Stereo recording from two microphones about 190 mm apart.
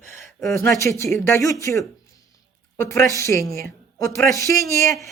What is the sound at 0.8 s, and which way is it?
A woman's voice, 15° left (ahead or behind).